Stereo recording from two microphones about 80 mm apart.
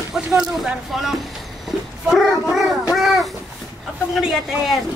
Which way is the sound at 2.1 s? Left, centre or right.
Centre.